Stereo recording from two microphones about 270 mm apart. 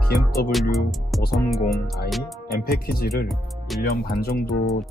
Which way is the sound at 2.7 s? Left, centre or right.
Left.